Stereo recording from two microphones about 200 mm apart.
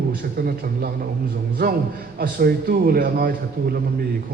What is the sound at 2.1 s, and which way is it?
A man's voice, 50° right (ahead or behind).